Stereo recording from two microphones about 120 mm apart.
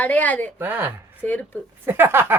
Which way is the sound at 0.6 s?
15° right (ahead or behind).